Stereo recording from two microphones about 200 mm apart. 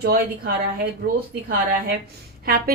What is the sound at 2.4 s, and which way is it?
Speech, 50° right (ahead or behind).